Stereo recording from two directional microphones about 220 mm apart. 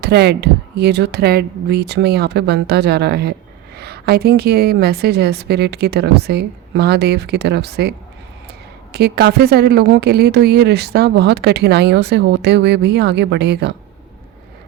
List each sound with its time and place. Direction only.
0.0 s speech: 50° right (ahead or behind)